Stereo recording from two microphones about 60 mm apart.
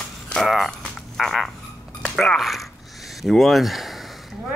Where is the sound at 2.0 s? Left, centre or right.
Centre.